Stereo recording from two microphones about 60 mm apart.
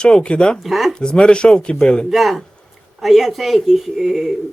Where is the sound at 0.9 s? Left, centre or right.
Centre.